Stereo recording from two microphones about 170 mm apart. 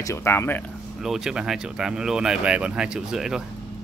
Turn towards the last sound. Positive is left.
turn(degrees=-5)  # may be behind; listen again after turning